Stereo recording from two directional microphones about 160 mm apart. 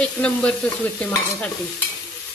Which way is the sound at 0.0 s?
5° left (ahead or behind).